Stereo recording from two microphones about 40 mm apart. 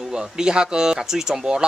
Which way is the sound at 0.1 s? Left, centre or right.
Centre.